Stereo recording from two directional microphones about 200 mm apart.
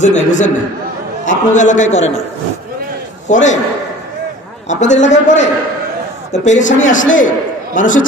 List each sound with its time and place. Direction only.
0.0 s a man's voice: 35° left (ahead or behind)
3.3 s a man's voice: 35° left (ahead or behind)
4.6 s a man's voice: 35° left (ahead or behind)